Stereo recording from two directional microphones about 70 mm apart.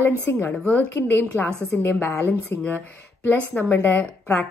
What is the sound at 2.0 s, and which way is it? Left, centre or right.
Speech, left.